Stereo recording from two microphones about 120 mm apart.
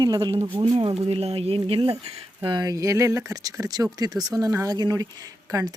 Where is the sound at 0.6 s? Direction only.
50° right (ahead or behind).